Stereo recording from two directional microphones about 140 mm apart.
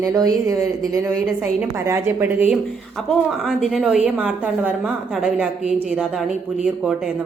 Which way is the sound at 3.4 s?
Centre (ahead or behind).